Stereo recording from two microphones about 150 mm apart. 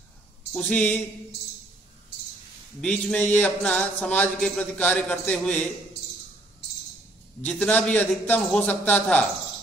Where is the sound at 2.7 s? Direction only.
5° left (ahead or behind).